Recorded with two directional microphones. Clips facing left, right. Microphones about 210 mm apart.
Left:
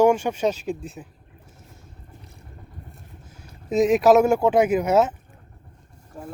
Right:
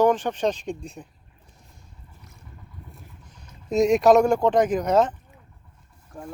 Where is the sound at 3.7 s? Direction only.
Centre (ahead or behind).